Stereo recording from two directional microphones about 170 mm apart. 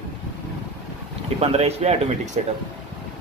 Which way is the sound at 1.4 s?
35° right (ahead or behind).